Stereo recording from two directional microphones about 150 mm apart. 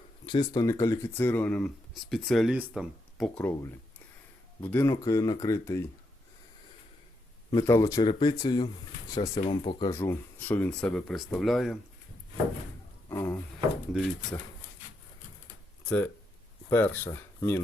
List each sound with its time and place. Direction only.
0.3 s speech: 25° left (ahead or behind); by 3.2 s centre (ahead or behind)
3.3 s speech: 15° left (ahead or behind)
7.5 s speech: 20° left (ahead or behind)
10.0 s speech: 15° left (ahead or behind)
13.1 s music: 15° left (ahead or behind)
13.9 s speech: centre (ahead or behind)
16.6 s speech: 15° left (ahead or behind)